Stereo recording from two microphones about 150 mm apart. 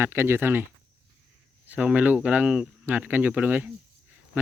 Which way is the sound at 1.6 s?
10° right (ahead or behind).